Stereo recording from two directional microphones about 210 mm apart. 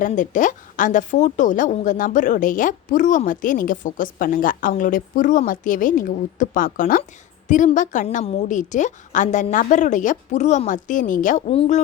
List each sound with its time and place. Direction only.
0.0 s a woman's voice: 40° left (ahead or behind)